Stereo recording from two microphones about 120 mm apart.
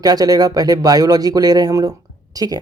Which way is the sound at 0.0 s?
30° right (ahead or behind).